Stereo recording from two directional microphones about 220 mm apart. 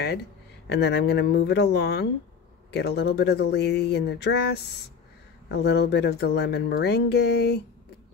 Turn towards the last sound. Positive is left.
turn(degrees=50)  # may be behind; listen again after turning